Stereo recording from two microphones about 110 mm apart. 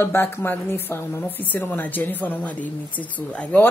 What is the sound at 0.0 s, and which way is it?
Speech, 20° left (ahead or behind).